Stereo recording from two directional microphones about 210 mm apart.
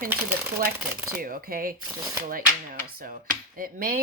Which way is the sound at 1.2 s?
45° right (ahead or behind).